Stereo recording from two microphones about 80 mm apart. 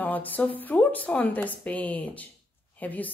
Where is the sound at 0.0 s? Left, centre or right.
Left.